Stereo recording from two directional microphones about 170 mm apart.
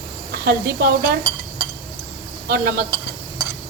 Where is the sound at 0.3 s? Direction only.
70° right (ahead or behind).